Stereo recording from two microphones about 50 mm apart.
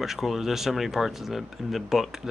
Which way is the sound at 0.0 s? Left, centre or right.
Centre.